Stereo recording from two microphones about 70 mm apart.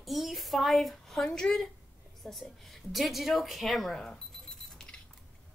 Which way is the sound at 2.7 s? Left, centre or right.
Centre.